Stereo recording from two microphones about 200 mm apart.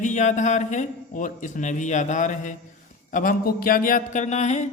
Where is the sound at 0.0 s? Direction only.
35° left (ahead or behind).